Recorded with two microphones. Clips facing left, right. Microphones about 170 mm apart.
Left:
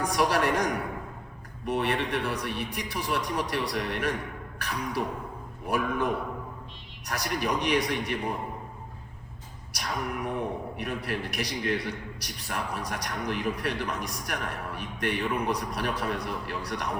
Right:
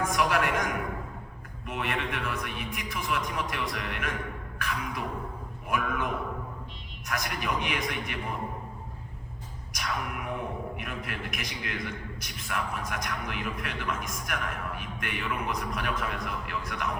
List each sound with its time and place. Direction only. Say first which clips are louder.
0.0 s a man's voice: left 2 dB; 35° left (ahead or behind)
7.1 s a man's voice: left 3 dB; 35° left (ahead or behind)
9.7 s a man's voice: left 2 dB; 35° left (ahead or behind)